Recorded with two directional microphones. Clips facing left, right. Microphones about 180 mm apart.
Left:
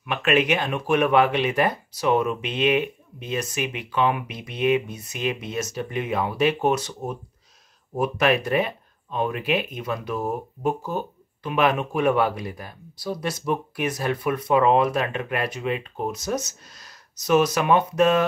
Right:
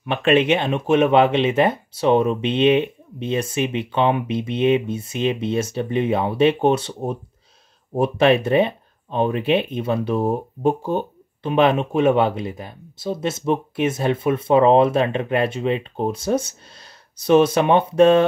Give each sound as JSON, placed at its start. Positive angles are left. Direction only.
{"t": 0.0, "sound": "speech", "side_deg": -30}